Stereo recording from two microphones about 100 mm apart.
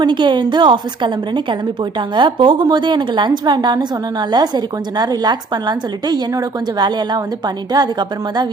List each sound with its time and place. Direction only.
0.0 s a woman's voice: 50° right (ahead or behind)